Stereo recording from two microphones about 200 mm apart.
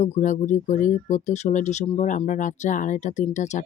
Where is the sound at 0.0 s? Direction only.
40° left (ahead or behind).